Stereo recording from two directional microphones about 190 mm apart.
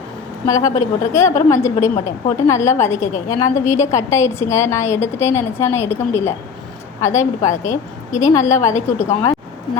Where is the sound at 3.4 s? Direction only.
40° left (ahead or behind).